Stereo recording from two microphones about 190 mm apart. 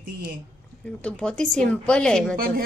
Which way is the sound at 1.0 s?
5° left (ahead or behind).